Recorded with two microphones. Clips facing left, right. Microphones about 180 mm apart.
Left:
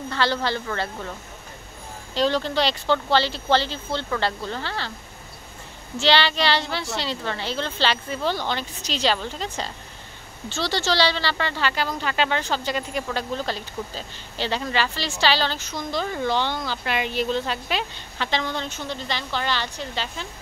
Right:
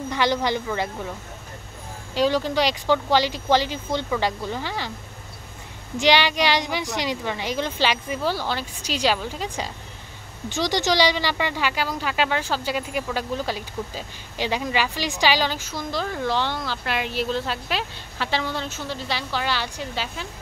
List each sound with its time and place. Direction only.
0.1 s speech: 15° right (ahead or behind)
2.1 s speech: 10° right (ahead or behind)
5.9 s speech: 15° right (ahead or behind)